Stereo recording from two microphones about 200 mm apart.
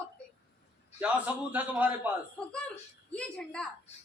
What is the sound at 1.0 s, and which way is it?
A man's voice, 10° right (ahead or behind).